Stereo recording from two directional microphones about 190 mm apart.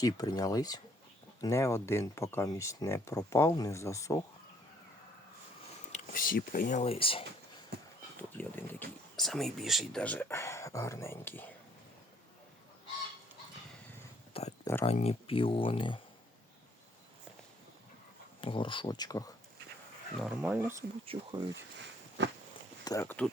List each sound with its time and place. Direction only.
0.0 s speech: 20° left (ahead or behind)
5.9 s speech: 45° left (ahead or behind); by 7.3 s 30° left (ahead or behind)
7.7 s horse: 55° right (ahead or behind)
8.4 s speech: 5° left (ahead or behind)
14.6 s a sound: 10° left (ahead or behind)
14.8 s speech: 35° left (ahead or behind)
18.3 s speech: 25° left (ahead or behind)
20.1 s speech: centre (ahead or behind)
21.1 s speech: 30° right (ahead or behind)
22.8 s speech: 15° left (ahead or behind)